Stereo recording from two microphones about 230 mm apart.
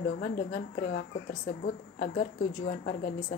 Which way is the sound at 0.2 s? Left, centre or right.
Left.